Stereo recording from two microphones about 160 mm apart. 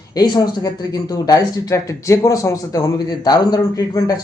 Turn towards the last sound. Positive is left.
turn(degrees=25)  # may be behind; listen again after turning